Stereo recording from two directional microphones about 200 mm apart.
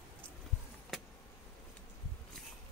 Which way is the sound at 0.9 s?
Centre (ahead or behind).